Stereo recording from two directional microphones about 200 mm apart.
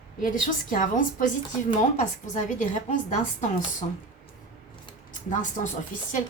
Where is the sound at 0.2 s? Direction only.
45° left (ahead or behind).